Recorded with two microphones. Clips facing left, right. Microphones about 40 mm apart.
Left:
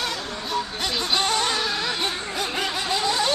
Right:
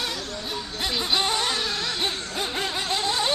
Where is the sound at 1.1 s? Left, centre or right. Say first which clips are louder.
Left 2 dB; centre.